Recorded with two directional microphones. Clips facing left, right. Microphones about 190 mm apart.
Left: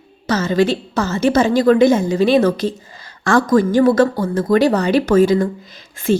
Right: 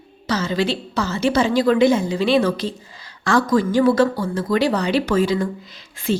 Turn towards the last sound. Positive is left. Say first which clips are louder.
# left 5 dB
turn(degrees=50)  # may be behind; listen again after turning